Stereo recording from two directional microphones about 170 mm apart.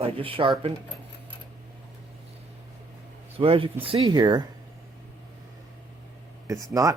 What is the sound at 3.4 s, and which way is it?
Speech, 30° right (ahead or behind).